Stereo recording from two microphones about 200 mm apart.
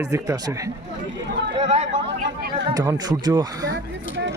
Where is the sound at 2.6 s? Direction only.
20° right (ahead or behind).